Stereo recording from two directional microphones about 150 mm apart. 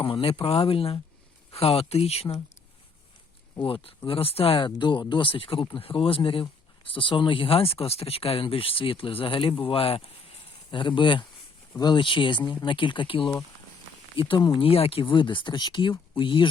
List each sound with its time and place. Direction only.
0.0 s speech: 35° left (ahead or behind)
3.5 s speech: 35° left (ahead or behind)
12.4 s speech: 10° left (ahead or behind)
12.6 s speech: 35° left (ahead or behind)